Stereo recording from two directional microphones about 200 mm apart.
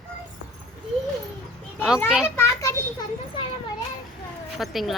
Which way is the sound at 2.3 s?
15° left (ahead or behind).